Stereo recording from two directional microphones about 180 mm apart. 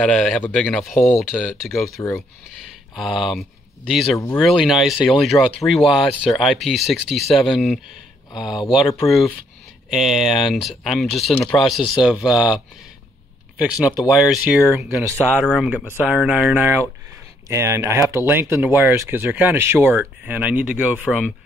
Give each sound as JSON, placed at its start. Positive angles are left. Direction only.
{"t": 0.0, "sound": "speech", "side_deg": 5}
{"t": 2.0, "sound": "speech", "side_deg": 15}
{"t": 3.0, "sound": "speech", "side_deg": 0}
{"t": 9.8, "sound": "speech", "side_deg": 0}
{"t": 14.9, "sound": "speech", "side_deg": -15}
{"t": 15.4, "sound": "speech", "side_deg": 0}